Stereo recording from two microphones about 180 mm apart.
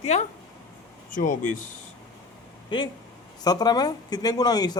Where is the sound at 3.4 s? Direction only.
20° left (ahead or behind).